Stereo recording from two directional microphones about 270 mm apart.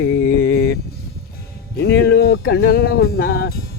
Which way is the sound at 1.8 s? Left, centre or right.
Left.